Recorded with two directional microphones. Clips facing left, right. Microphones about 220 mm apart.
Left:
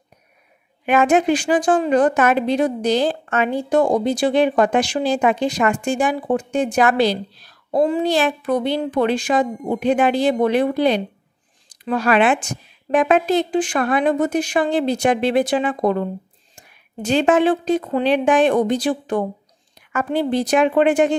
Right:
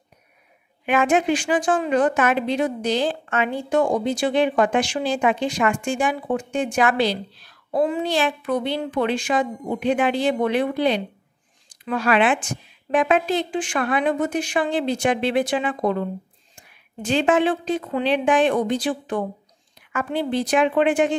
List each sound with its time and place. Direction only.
0.8 s a woman's voice: 40° left (ahead or behind)